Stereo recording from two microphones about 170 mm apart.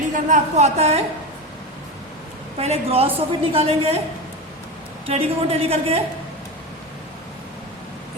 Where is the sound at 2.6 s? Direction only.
35° right (ahead or behind).